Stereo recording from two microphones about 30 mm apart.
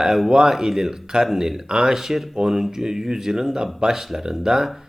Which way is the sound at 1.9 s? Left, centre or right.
Centre.